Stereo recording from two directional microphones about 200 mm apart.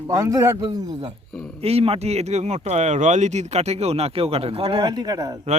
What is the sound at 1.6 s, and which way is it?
Speech, 30° right (ahead or behind).